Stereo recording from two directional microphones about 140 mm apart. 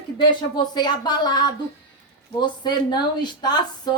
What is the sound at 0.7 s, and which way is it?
Speech, 30° left (ahead or behind).